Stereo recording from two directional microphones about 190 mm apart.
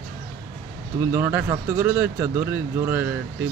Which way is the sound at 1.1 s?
15° right (ahead or behind).